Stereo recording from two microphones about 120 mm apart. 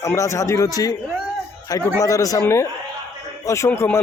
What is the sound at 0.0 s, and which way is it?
Speech, 25° left (ahead or behind).